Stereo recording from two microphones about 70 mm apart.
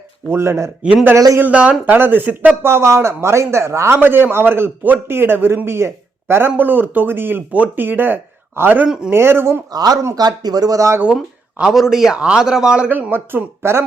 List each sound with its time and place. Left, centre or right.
0.3 s speech: right
1.4 s speech: right
2.6 s speech: right
9.7 s speech: right
11.0 s speech: centre
11.7 s speech: centre
12.9 s speech: right